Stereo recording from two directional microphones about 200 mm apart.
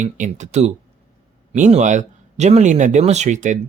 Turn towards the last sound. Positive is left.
turn(degrees=-35)  # may be behind; listen again after turning